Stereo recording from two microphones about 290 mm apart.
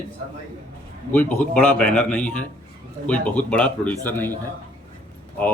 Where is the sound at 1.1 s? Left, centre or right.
Centre.